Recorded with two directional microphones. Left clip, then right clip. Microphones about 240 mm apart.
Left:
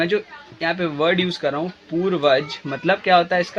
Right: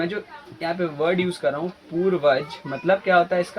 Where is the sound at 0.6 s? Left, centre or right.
Left.